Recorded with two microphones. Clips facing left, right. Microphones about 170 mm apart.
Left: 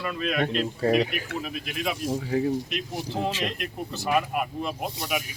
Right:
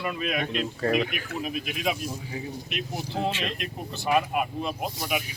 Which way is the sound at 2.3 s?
40° left (ahead or behind).